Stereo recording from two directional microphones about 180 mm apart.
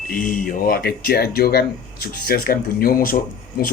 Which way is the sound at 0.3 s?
50° left (ahead or behind).